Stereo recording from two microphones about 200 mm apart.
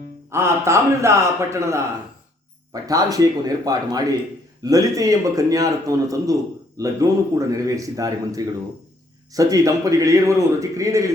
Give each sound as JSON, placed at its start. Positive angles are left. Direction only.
{"t": 0.3, "sound": "a man's voice", "side_deg": -15}
{"t": 2.8, "sound": "a man's voice", "side_deg": -20}